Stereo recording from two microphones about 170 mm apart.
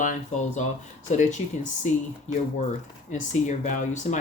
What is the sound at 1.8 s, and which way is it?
Speech, 45° left (ahead or behind).